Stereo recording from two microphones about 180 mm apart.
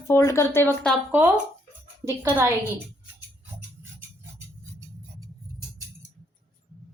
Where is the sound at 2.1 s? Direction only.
15° right (ahead or behind).